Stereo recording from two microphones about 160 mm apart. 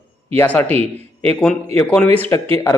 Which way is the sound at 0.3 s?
10° left (ahead or behind).